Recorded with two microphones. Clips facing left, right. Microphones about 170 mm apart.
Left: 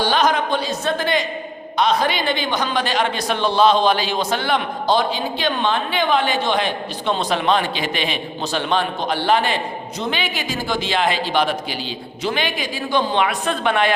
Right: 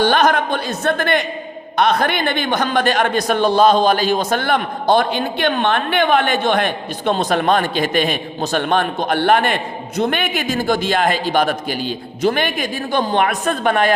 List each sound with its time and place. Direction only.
0.0 s a woman's voice: 55° right (ahead or behind)